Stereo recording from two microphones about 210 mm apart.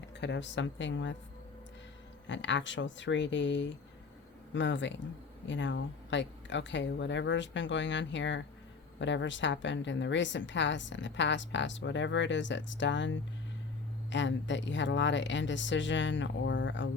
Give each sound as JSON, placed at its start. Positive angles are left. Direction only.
{"t": 0.2, "sound": "a woman's voice", "side_deg": 55}
{"t": 2.2, "sound": "a woman's voice", "side_deg": 60}